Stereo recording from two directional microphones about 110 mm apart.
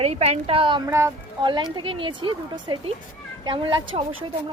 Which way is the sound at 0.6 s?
45° right (ahead or behind).